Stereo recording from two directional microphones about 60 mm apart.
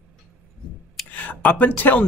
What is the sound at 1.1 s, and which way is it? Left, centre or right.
Speech, left.